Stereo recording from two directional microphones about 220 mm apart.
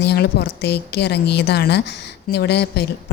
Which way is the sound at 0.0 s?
50° left (ahead or behind).